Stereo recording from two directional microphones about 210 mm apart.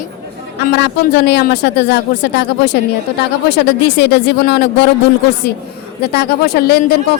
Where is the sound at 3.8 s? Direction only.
55° left (ahead or behind).